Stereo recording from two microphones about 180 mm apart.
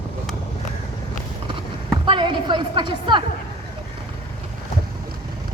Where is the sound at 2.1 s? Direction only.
25° right (ahead or behind).